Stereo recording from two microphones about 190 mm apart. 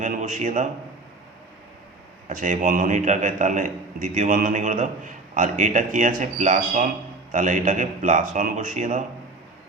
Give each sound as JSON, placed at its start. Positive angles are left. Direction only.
{"t": 0.0, "sound": "a man's voice", "side_deg": -40}
{"t": 2.3, "sound": "a man's voice", "side_deg": -40}